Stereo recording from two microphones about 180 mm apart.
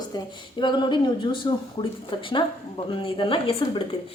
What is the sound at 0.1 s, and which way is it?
Speech, 25° left (ahead or behind).